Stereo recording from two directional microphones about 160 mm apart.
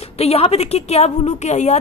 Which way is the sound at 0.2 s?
40° left (ahead or behind).